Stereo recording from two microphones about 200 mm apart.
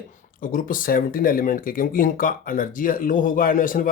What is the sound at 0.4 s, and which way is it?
Speech, 45° left (ahead or behind).